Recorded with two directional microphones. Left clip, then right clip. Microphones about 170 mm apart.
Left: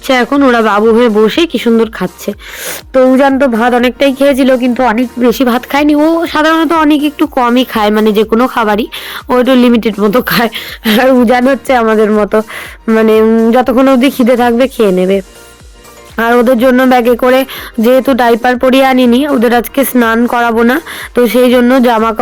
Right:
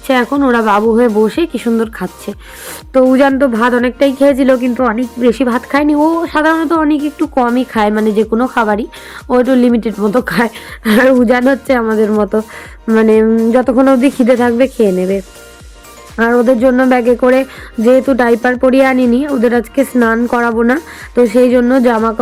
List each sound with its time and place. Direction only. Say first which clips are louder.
0.1 s speech: left 3 dB; 30° left (ahead or behind)